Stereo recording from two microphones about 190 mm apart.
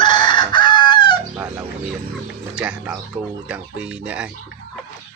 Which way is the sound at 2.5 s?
5° right (ahead or behind).